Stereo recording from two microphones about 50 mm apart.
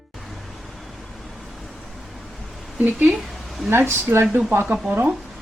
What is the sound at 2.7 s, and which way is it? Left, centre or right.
Speech, right.